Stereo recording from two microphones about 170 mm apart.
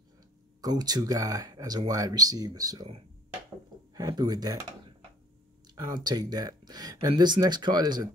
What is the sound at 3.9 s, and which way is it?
Speech, 25° right (ahead or behind).